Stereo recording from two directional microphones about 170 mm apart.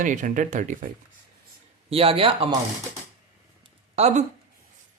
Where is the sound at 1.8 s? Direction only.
35° right (ahead or behind).